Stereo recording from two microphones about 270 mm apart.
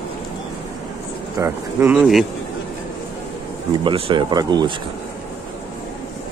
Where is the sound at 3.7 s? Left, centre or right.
Centre.